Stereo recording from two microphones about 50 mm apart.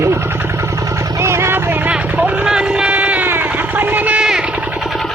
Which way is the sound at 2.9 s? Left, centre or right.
Right.